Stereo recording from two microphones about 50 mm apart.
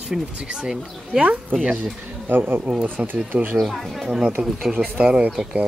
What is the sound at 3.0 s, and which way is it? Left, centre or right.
Speech, right.